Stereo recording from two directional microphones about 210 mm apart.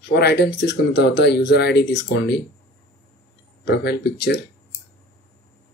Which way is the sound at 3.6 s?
55° left (ahead or behind).